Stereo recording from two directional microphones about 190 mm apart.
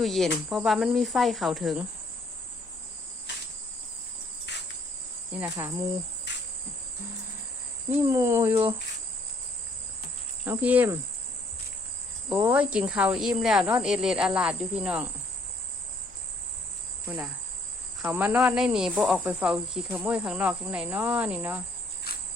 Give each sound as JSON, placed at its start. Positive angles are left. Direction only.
{"t": 0.0, "sound": "speech", "side_deg": 0}
{"t": 5.4, "sound": "speech", "side_deg": -15}
{"t": 7.9, "sound": "speech", "side_deg": -10}
{"t": 10.4, "sound": "speech", "side_deg": -10}
{"t": 12.5, "sound": "speech", "side_deg": -5}
{"t": 18.0, "sound": "speech", "side_deg": -10}
{"t": 22.1, "sound": "cricket", "side_deg": 55}